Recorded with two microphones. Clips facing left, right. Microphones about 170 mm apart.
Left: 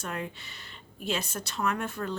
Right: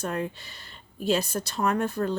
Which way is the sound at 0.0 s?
35° right (ahead or behind).